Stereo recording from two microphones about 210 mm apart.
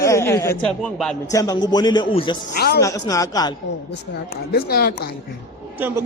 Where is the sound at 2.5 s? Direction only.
50° left (ahead or behind).